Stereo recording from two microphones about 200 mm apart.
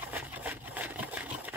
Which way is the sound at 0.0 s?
10° right (ahead or behind).